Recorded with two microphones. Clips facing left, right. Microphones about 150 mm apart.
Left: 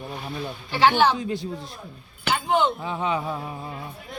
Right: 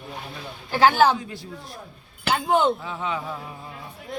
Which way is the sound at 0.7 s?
45° right (ahead or behind).